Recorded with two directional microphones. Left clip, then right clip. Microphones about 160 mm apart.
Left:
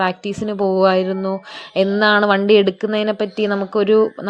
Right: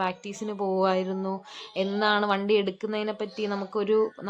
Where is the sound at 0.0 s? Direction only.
30° left (ahead or behind).